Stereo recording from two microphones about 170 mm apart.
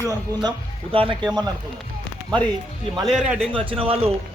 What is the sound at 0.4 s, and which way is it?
Speech, 30° right (ahead or behind).